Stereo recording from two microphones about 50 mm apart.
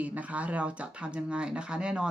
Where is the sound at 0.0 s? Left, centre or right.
Right.